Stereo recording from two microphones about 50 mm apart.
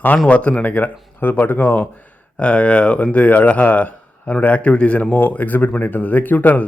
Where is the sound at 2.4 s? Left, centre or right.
Left.